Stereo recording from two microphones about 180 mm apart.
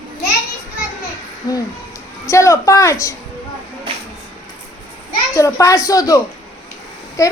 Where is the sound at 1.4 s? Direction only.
20° left (ahead or behind).